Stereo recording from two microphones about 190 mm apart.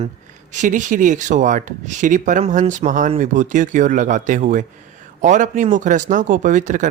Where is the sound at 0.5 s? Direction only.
40° right (ahead or behind).